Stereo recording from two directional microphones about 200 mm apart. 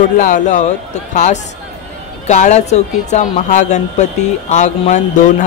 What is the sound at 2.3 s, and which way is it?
A woman's voice, 35° left (ahead or behind).